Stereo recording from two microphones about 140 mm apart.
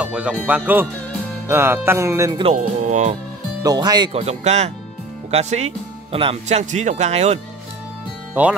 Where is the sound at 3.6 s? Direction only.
30° right (ahead or behind).